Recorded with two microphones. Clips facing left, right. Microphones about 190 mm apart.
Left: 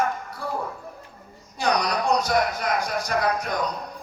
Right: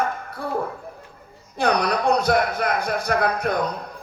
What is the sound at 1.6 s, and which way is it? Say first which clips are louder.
A man's voice: right 3 dB; 55° right (ahead or behind).